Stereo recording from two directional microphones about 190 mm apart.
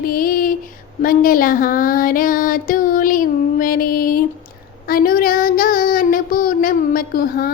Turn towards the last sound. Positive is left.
turn(degrees=50)  # may be behind; listen again after turning